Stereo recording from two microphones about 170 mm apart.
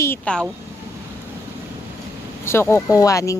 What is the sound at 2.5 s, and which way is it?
Speech, 15° left (ahead or behind).